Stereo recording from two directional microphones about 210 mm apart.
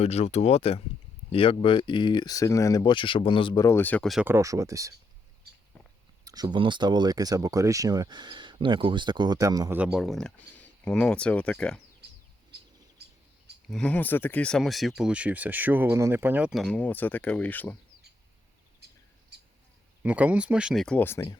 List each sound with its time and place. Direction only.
0.0 s speech: 30° left (ahead or behind); by 4.9 s 15° right (ahead or behind)
6.2 s speech: 20° right (ahead or behind); by 11.8 s 5° left (ahead or behind)
12.5 s bird: 50° right (ahead or behind)
13.0 s a sound: 50° right (ahead or behind)
13.7 s speech: 5° left (ahead or behind)
20.0 s speech: 5° right (ahead or behind); by 21.3 s 15° left (ahead or behind)